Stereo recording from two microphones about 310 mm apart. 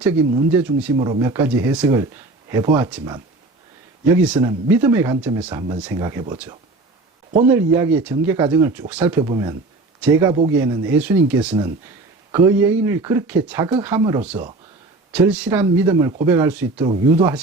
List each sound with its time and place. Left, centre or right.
0.0 s speech: centre
0.9 s speech: centre
1.2 s speech: centre